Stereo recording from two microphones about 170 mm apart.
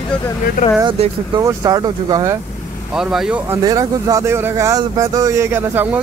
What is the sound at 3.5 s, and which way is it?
Speech, 20° right (ahead or behind).